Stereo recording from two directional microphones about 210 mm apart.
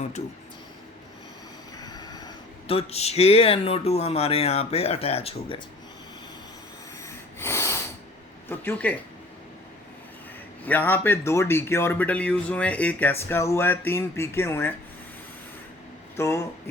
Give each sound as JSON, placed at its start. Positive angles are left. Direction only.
{"t": 1.8, "sound": "speech", "side_deg": 20}
{"t": 7.0, "sound": "a sound", "side_deg": 15}
{"t": 8.4, "sound": "speech", "side_deg": 10}
{"t": 10.6, "sound": "speech", "side_deg": 10}
{"t": 16.1, "sound": "speech", "side_deg": 15}